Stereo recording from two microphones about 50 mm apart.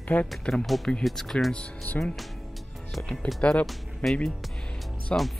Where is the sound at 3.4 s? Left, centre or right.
Left.